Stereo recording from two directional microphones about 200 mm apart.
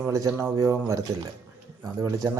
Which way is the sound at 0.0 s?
15° right (ahead or behind).